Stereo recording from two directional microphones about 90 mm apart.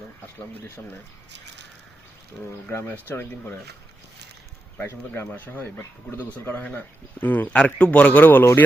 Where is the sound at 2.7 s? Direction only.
25° left (ahead or behind).